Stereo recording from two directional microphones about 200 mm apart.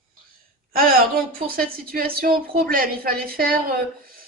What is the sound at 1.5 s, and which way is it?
Speech, 45° right (ahead or behind).